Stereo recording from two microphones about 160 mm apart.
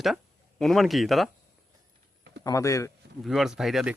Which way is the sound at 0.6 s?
Centre (ahead or behind).